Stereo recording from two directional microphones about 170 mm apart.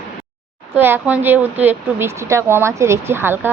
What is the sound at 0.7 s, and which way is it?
Speech, 10° right (ahead or behind).